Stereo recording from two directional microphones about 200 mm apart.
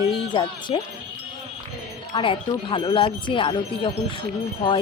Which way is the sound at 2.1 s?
25° left (ahead or behind).